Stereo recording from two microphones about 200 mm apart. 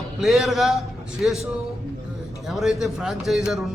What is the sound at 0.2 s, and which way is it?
A man's voice, centre (ahead or behind).